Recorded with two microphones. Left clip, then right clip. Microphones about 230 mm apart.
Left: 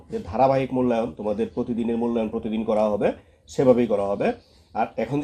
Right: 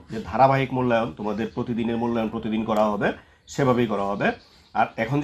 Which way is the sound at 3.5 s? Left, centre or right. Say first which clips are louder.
Left 4 dB; right.